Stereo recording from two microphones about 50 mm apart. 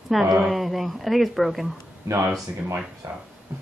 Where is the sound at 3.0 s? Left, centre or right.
Right.